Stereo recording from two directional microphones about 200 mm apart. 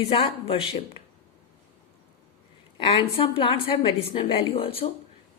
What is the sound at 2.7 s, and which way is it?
A woman's voice, 30° left (ahead or behind).